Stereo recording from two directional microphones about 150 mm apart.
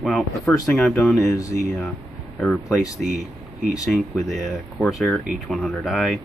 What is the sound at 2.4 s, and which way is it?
Speech, centre (ahead or behind).